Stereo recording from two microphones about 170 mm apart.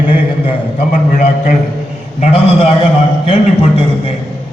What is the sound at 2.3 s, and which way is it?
A man's voice, 35° left (ahead or behind).